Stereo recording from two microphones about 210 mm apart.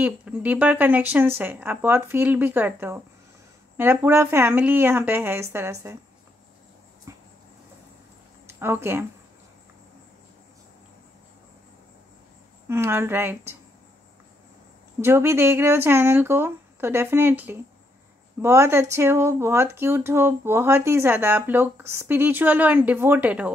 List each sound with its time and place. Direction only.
0.0 s speech: 10° right (ahead or behind)
7.1 s a sound: 15° right (ahead or behind)
8.5 s speech: 10° right (ahead or behind)
12.6 s speech: 10° right (ahead or behind)
15.0 s speech: 10° right (ahead or behind)